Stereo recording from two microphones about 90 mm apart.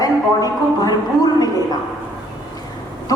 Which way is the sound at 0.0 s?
45° left (ahead or behind).